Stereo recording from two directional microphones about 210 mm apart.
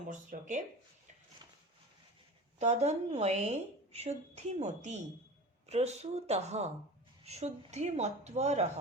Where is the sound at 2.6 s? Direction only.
30° right (ahead or behind).